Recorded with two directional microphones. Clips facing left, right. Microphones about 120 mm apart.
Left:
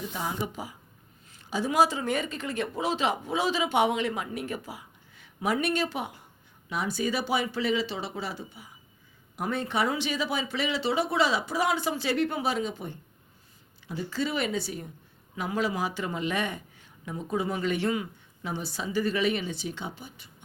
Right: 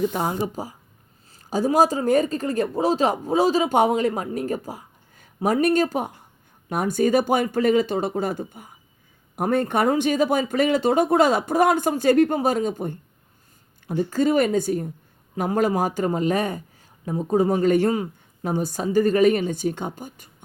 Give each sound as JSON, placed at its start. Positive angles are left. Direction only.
{"t": 0.0, "sound": "speech", "side_deg": -55}
{"t": 0.3, "sound": "a woman's voice", "side_deg": -40}